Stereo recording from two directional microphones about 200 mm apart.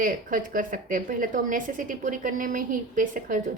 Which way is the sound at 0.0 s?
45° right (ahead or behind).